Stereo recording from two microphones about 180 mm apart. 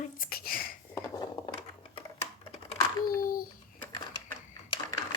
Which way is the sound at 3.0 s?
50° left (ahead or behind).